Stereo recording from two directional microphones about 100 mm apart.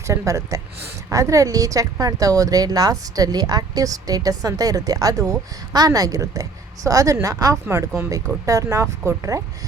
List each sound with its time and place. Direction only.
0.1 s a woman's voice: 30° right (ahead or behind)